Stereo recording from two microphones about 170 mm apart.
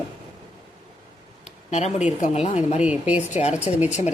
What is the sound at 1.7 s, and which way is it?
Speech, 40° left (ahead or behind).